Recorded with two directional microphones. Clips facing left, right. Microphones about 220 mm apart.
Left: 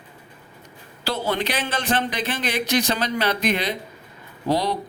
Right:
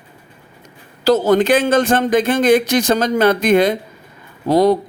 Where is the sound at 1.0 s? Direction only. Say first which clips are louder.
Right 12 dB; 45° right (ahead or behind).